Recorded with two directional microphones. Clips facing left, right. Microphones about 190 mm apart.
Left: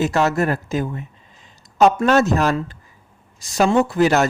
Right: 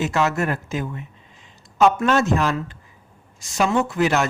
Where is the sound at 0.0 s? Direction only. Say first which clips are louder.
Left 3 dB; 35° left (ahead or behind).